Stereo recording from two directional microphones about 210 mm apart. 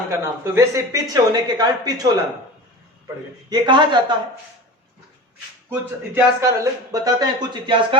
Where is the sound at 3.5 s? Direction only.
20° right (ahead or behind).